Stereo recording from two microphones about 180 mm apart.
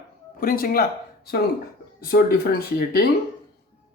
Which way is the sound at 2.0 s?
55° left (ahead or behind).